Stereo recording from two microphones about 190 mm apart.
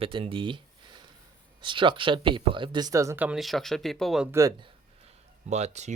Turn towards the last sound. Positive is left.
turn(degrees=-35)  # may be behind; listen again after turning